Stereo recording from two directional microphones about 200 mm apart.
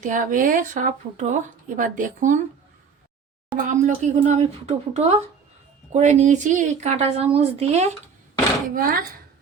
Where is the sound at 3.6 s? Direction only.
40° right (ahead or behind).